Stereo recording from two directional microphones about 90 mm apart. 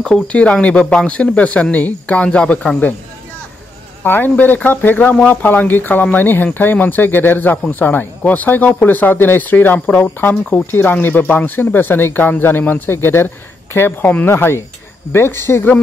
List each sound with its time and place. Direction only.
0.0 s speech: 10° left (ahead or behind)
4.0 s speech: 20° left (ahead or behind)